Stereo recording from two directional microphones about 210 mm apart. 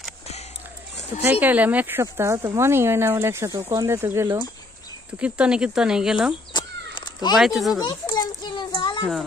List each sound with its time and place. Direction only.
1.2 s speech: 10° right (ahead or behind)
6.5 s a sound: 20° left (ahead or behind)
7.3 s speech: centre (ahead or behind)
7.8 s children playing: 20° left (ahead or behind)